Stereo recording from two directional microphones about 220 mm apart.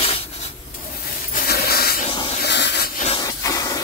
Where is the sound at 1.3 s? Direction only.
45° left (ahead or behind).